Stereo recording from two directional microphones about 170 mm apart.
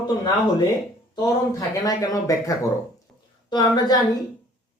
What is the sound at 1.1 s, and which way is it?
Speech, 20° left (ahead or behind).